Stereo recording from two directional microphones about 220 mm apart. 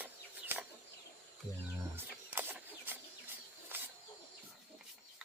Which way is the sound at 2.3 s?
10° right (ahead or behind).